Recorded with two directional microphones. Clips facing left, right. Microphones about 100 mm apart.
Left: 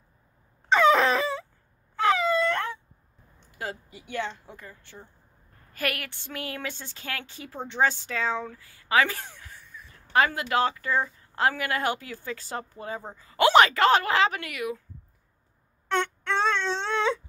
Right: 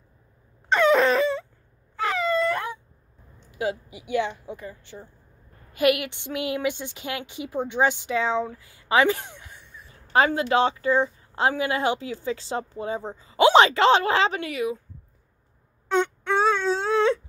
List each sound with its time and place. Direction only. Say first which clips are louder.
0.7 s wail: right 1 dB; centre (ahead or behind)
3.5 s a woman's voice: right 8 dB; 15° right (ahead or behind)
15.9 s wail: right 4 dB; 10° right (ahead or behind)